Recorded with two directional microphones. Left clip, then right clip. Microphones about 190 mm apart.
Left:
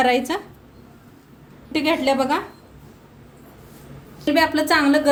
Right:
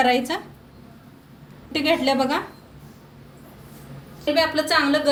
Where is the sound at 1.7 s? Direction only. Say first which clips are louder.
Left 1 dB; 55° left (ahead or behind).